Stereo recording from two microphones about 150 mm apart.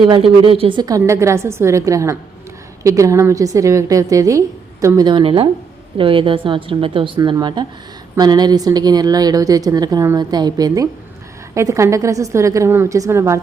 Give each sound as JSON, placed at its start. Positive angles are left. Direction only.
{"t": 0.0, "sound": "a woman's voice", "side_deg": -35}